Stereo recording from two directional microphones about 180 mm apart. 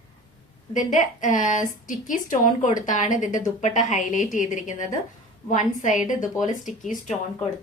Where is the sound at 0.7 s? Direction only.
45° left (ahead or behind).